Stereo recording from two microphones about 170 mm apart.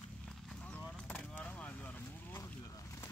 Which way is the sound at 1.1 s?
10° left (ahead or behind).